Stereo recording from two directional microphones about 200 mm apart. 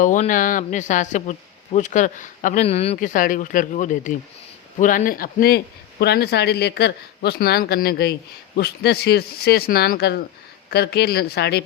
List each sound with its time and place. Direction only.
0.0 s a man's voice: 40° left (ahead or behind); by 11.6 s 55° left (ahead or behind)